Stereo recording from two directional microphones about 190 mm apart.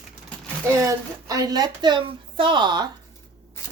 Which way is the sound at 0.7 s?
15° right (ahead or behind).